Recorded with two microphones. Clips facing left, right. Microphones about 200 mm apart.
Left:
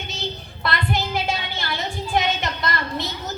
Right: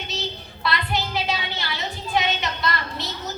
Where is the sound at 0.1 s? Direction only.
50° left (ahead or behind).